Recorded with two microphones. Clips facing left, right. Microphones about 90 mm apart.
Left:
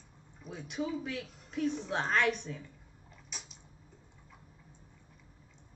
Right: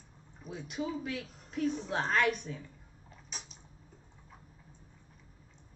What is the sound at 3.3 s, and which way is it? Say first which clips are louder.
Mechanisms: right 1 dB; 40° right (ahead or behind).